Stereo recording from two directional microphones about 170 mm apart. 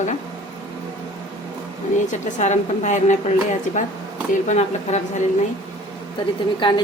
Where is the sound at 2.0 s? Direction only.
45° left (ahead or behind).